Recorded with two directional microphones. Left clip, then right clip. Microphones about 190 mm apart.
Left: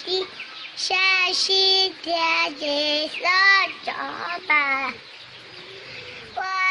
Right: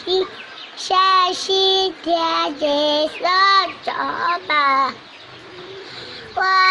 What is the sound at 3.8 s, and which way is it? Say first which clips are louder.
Speech: right 8 dB; 5° left (ahead or behind).